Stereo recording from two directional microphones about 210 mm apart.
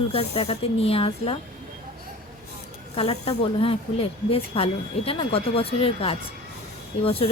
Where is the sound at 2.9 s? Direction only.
30° left (ahead or behind).